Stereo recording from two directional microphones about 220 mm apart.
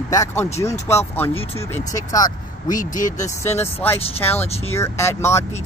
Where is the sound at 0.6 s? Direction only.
10° left (ahead or behind).